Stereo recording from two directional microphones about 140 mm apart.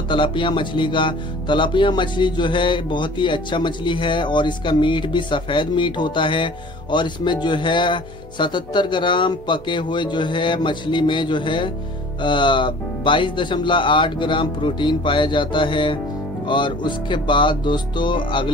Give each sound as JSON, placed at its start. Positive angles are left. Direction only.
{"t": 0.1, "sound": "speech", "side_deg": 35}